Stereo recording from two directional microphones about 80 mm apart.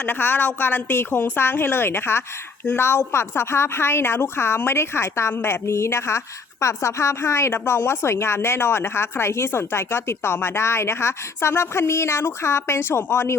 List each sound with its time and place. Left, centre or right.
0.0 s a woman's voice: left